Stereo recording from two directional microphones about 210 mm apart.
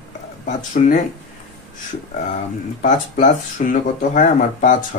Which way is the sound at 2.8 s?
35° left (ahead or behind).